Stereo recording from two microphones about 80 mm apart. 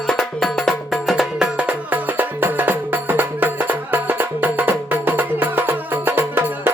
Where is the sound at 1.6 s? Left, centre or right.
Centre.